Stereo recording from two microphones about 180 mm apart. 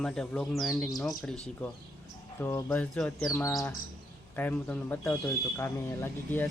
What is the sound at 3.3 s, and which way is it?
A man's voice, 15° left (ahead or behind).